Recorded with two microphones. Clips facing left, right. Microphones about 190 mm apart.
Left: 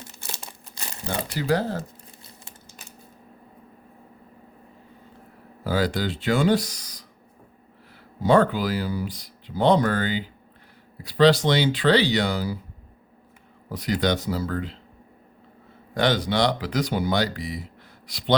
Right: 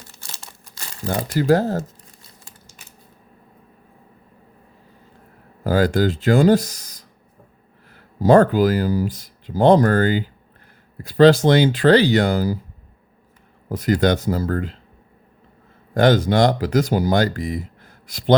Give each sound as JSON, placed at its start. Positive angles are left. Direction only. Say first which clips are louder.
{"t": 1.0, "sound": "speech", "louder": "right 7 dB", "side_deg": -45}
{"t": 5.6, "sound": "speech", "louder": "right 7 dB", "side_deg": -45}
{"t": 8.3, "sound": "speech", "louder": "right 6 dB", "side_deg": -45}
{"t": 13.7, "sound": "speech", "louder": "right 6 dB", "side_deg": -45}
{"t": 16.0, "sound": "speech", "louder": "right 7 dB", "side_deg": -45}